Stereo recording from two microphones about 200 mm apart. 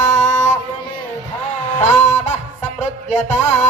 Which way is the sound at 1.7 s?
35° left (ahead or behind).